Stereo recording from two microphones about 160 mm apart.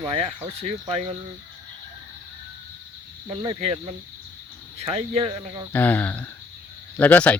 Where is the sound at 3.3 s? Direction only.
30° right (ahead or behind).